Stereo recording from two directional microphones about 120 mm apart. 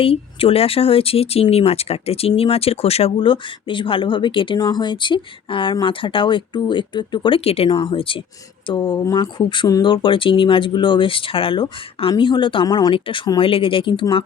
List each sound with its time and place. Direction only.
0.0 s speech: 50° left (ahead or behind)
7.7 s speech: 40° left (ahead or behind)
9.1 s speech: 45° left (ahead or behind)